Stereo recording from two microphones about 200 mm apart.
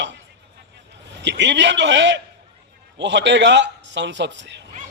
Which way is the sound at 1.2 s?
60° right (ahead or behind).